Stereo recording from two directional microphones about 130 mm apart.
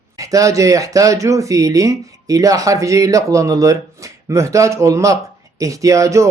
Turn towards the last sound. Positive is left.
turn(degrees=-25)  # may be behind; listen again after turning